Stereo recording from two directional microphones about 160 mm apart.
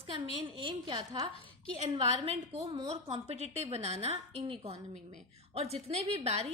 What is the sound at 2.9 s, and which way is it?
A woman's voice, 45° right (ahead or behind).